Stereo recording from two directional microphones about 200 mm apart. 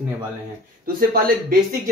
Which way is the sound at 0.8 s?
50° right (ahead or behind).